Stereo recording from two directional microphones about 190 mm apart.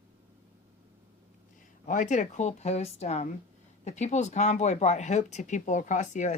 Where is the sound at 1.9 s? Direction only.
40° left (ahead or behind).